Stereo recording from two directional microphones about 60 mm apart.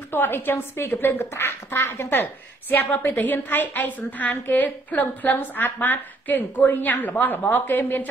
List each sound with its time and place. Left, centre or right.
0.1 s a woman's voice: left